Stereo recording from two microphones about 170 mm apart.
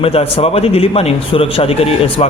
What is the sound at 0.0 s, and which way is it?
A man's voice, 35° left (ahead or behind).